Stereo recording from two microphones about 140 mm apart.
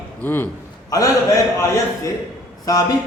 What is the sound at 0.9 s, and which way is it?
Speech, 25° left (ahead or behind).